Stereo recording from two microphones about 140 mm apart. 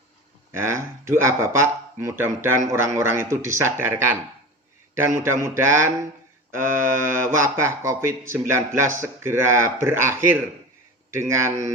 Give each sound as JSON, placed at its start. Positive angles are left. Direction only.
{"t": 0.6, "sound": "speech", "side_deg": -20}